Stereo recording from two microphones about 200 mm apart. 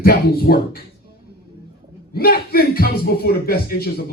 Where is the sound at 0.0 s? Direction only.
50° left (ahead or behind).